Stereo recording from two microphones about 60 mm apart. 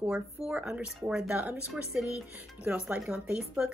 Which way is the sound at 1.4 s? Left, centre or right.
Right.